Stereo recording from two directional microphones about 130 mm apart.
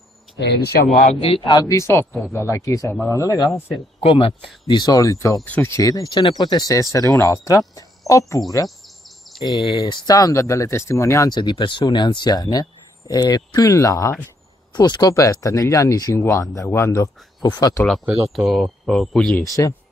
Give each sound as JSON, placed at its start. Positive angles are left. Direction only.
{"t": 1.2, "sound": "speech", "side_deg": 40}
{"t": 1.8, "sound": "speech", "side_deg": 20}
{"t": 4.0, "sound": "speech", "side_deg": 45}
{"t": 4.6, "sound": "speech", "side_deg": 30}
{"t": 5.8, "sound": "speech", "side_deg": 25}
{"t": 8.6, "sound": "a sound", "side_deg": 0}
{"t": 9.4, "sound": "speech", "side_deg": 35}
{"t": 18.0, "sound": "speech", "side_deg": -5}
{"t": 19.4, "sound": "speech", "side_deg": 25}